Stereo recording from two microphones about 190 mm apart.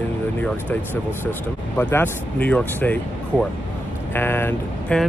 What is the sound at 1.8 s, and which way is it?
Speech, 10° left (ahead or behind).